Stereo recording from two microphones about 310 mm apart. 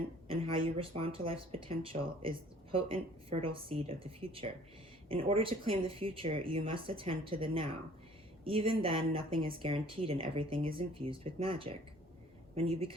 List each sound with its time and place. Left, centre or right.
0.3 s speech: centre